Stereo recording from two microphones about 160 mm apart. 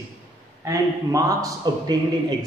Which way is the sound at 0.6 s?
20° right (ahead or behind).